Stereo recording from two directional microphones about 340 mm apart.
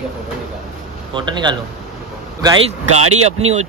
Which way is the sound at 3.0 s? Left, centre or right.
Right.